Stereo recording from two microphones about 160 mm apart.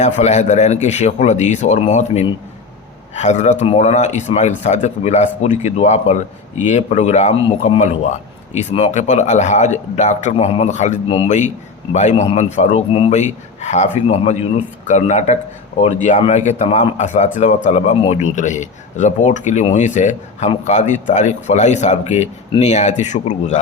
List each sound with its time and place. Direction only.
0.0 s a man's voice: 45° left (ahead or behind)